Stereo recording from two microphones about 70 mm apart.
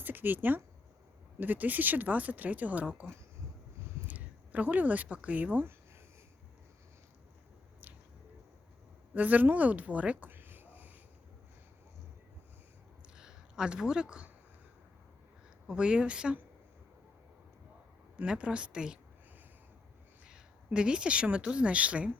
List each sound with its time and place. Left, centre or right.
0.0 s speech: right
9.1 s speech: right
13.1 s a sound: centre
15.6 s speech: centre
18.2 s speech: centre
20.2 s speech: centre